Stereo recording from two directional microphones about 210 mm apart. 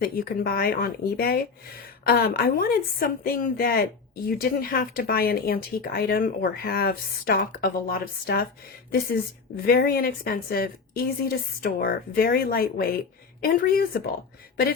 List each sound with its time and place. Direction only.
0.0 s a woman's voice: 45° left (ahead or behind)
9.6 s a woman's voice: 45° left (ahead or behind)